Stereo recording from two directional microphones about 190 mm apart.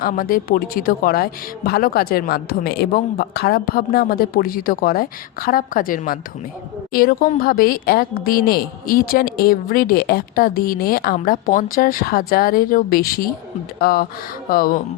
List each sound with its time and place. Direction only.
0.0 s a woman's voice: 50° left (ahead or behind)